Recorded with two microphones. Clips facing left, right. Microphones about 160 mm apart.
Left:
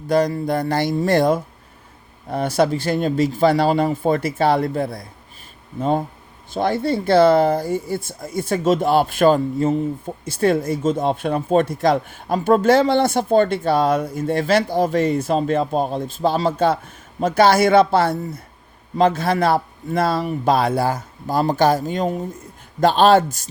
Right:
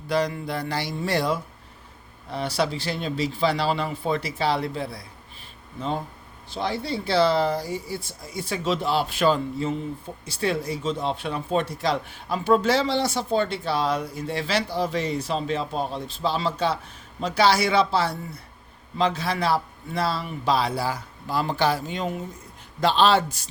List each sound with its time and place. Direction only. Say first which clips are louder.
0.1 s speech: left 7 dB; 45° left (ahead or behind)
6.5 s speech: left 8 dB; 50° left (ahead or behind)